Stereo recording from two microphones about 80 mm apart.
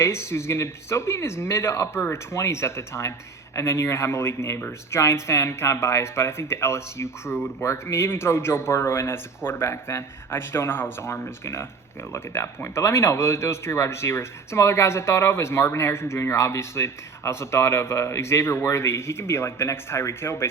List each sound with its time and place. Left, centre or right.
0.0 s speech: left